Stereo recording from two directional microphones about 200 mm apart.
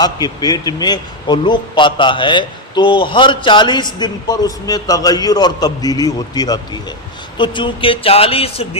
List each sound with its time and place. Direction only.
0.0 s a man's voice: 20° left (ahead or behind)